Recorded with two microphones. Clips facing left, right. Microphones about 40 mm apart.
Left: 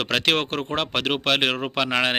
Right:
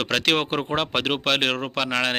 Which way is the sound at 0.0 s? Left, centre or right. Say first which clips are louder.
Even; centre.